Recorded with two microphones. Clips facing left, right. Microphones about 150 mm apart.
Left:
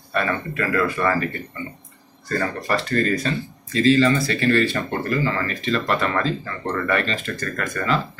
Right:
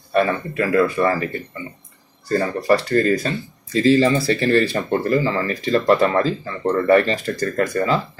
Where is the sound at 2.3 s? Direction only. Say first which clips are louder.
Right 6 dB; 35° right (ahead or behind).